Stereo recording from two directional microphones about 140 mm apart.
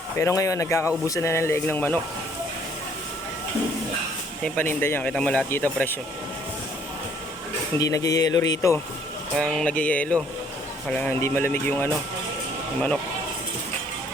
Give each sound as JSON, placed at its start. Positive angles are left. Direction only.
{"t": 0.2, "sound": "speech", "side_deg": 20}
{"t": 4.4, "sound": "speech", "side_deg": 15}
{"t": 7.8, "sound": "speech", "side_deg": 25}
{"t": 9.3, "sound": "speech", "side_deg": 5}